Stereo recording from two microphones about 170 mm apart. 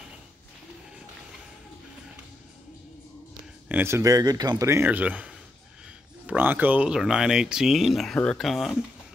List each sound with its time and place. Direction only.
3.6 s speech: 10° right (ahead or behind)